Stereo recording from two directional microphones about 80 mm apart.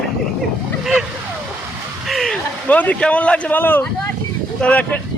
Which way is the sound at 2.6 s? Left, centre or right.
Centre.